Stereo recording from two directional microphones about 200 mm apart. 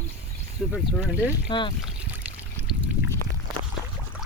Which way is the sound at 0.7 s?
5° right (ahead or behind).